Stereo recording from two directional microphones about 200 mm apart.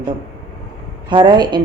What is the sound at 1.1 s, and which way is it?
Speech, 20° right (ahead or behind).